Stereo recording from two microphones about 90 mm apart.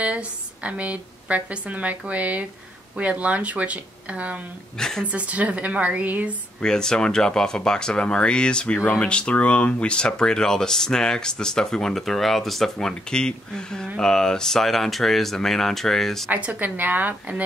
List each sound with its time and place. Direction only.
0.0 s a woman's voice: 15° right (ahead or behind)
4.7 s speech: 5° left (ahead or behind)
5.0 s a woman's voice: 15° right (ahead or behind)
6.6 s speech: 5° left (ahead or behind)
16.3 s a woman's voice: 15° right (ahead or behind)